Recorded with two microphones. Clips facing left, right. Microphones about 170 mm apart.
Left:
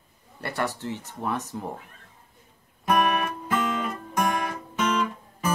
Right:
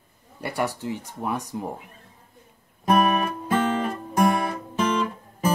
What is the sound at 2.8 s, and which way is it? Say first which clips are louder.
Music: right 3 dB; 35° right (ahead or behind).